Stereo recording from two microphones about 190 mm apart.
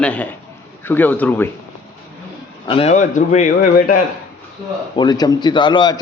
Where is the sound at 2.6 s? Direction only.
30° left (ahead or behind); by 4.0 s 45° left (ahead or behind).